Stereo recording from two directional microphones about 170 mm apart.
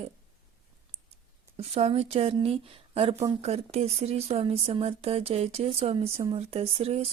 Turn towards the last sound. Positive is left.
turn(degrees=-35)  # may be behind; listen again after turning